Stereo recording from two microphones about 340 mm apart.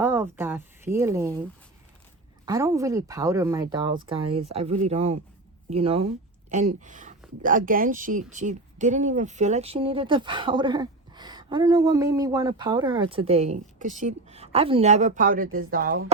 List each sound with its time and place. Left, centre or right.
0.0 s speech: centre
2.5 s speech: centre; by 16.1 s right